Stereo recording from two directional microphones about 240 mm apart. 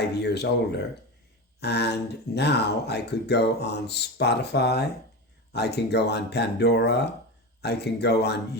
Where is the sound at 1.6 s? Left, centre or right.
Left.